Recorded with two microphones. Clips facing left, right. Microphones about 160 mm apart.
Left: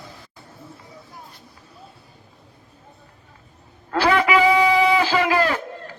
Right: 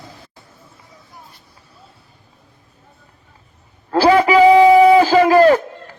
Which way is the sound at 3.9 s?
35° right (ahead or behind).